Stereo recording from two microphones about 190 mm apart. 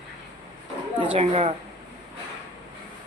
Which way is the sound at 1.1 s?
30° right (ahead or behind).